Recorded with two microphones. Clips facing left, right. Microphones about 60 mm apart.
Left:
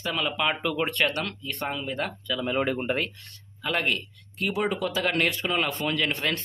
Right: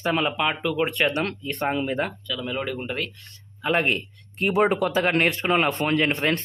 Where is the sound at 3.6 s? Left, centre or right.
Right.